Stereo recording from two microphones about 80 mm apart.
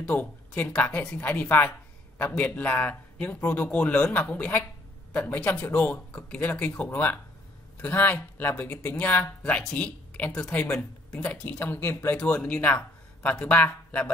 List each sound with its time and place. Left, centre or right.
0.0 s speech: centre
9.4 s speech: centre